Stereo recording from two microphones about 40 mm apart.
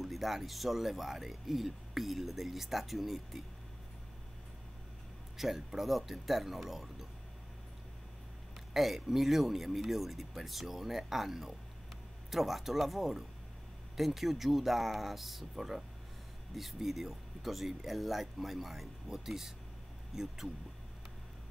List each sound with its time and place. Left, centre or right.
0.0 s speech: centre
5.4 s speech: centre
8.5 s speech: centre